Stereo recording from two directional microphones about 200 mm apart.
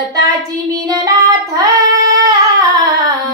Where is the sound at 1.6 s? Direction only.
15° right (ahead or behind).